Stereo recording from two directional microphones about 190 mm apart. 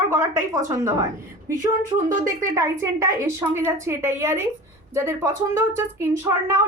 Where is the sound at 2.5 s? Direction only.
15° right (ahead or behind).